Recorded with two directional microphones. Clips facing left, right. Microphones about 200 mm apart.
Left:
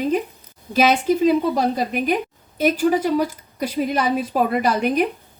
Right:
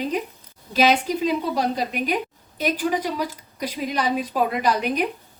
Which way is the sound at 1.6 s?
45° left (ahead or behind).